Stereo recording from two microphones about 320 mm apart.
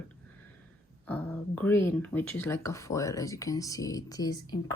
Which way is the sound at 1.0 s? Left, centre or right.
Centre.